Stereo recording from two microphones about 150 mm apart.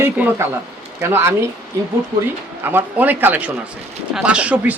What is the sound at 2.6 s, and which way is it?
Speech, 15° right (ahead or behind).